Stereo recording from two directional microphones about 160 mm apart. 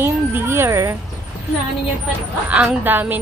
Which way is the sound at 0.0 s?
15° right (ahead or behind).